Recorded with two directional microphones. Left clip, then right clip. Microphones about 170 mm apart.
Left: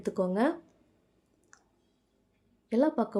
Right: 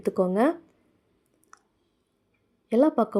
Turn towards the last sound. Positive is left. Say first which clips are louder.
# right 6 dB
turn(degrees=-15)  # may be behind; listen again after turning